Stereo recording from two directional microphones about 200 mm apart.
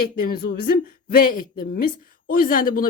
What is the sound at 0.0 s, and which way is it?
Speech, 45° left (ahead or behind).